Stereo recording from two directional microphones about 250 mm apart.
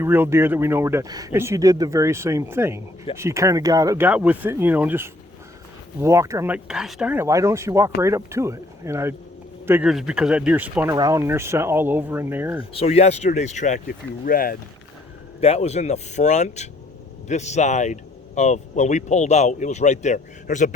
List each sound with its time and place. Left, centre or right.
0.0 s speech: centre
12.7 s speech: left
15.4 s speech: left